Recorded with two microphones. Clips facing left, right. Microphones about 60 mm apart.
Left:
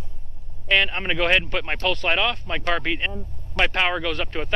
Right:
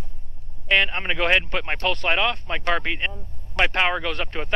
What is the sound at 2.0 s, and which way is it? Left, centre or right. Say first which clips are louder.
Speech: even; centre.